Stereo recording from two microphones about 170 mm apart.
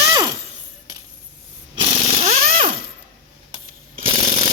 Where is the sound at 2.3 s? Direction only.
55° right (ahead or behind).